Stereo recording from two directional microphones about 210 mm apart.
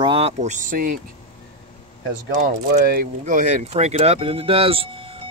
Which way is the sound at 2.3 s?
40° right (ahead or behind).